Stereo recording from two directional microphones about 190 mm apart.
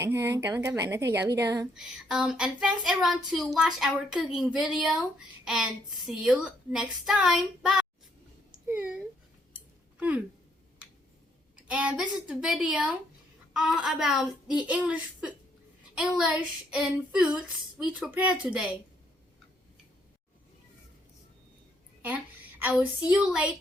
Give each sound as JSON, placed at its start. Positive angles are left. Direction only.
{"t": 0.0, "sound": "speech", "side_deg": -15}
{"t": 1.7, "sound": "speech", "side_deg": -5}
{"t": 8.6, "sound": "a sound", "side_deg": -10}
{"t": 11.5, "sound": "speech", "side_deg": -5}
{"t": 22.0, "sound": "a woman's voice", "side_deg": -10}